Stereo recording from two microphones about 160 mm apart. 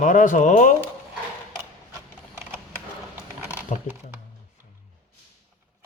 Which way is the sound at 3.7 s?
50° left (ahead or behind).